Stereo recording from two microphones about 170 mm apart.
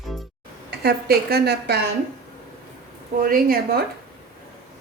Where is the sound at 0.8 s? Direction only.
65° right (ahead or behind).